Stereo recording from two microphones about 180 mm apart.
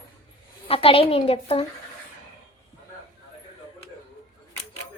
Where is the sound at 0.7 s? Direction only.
30° left (ahead or behind).